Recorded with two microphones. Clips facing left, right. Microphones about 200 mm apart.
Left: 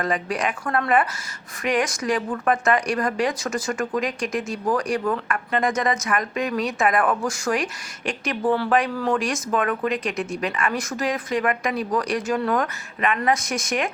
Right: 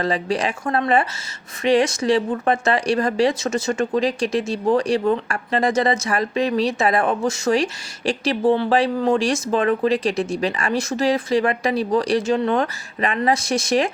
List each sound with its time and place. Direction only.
0.0 s speech: 30° right (ahead or behind)